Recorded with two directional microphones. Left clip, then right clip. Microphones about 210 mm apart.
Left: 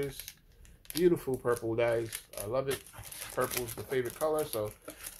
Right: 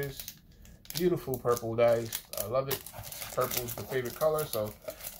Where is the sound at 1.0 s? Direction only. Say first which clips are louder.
Left 1 dB; 55° left (ahead or behind).